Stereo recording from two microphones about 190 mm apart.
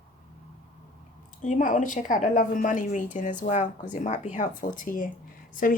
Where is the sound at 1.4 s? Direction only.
40° left (ahead or behind).